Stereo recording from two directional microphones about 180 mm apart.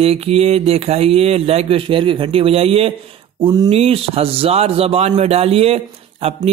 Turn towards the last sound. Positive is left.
turn(degrees=-30)  # may be behind; listen again after turning